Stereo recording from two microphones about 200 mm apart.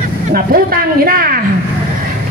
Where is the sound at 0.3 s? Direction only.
45° right (ahead or behind).